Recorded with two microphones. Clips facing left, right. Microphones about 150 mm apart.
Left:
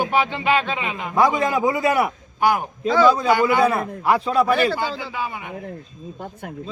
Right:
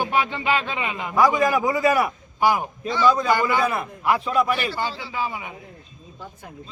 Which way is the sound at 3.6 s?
30° left (ahead or behind).